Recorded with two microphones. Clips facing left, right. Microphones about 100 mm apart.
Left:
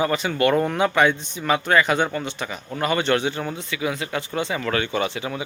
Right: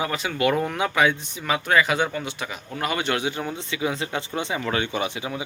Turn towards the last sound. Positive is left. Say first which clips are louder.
# left 2 dB
turn(degrees=-15)  # may be behind; listen again after turning